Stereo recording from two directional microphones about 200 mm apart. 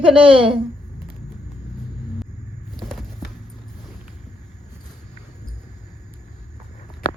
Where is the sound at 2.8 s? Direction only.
Centre (ahead or behind).